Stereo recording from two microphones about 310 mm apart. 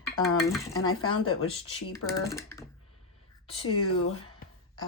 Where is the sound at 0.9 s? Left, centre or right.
Left.